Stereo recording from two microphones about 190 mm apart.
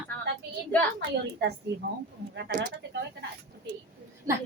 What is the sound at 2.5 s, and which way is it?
Speech, 55° right (ahead or behind).